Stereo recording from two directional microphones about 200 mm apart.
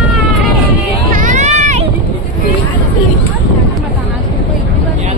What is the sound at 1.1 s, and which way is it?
Run, 40° right (ahead or behind).